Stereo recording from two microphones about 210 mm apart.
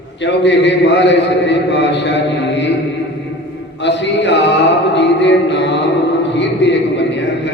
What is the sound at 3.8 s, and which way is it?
A man's voice, 55° left (ahead or behind).